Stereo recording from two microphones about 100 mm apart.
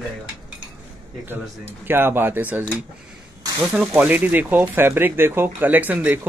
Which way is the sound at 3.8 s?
15° right (ahead or behind).